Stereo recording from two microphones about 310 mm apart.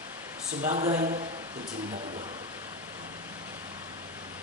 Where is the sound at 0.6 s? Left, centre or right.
Right.